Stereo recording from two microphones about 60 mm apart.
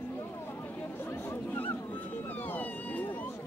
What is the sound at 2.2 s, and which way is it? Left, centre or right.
Police car, left.